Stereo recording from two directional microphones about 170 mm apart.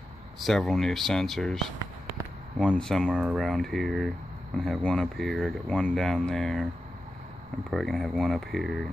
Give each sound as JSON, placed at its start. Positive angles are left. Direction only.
{"t": 0.4, "sound": "speech", "side_deg": 0}
{"t": 7.7, "sound": "speech", "side_deg": 0}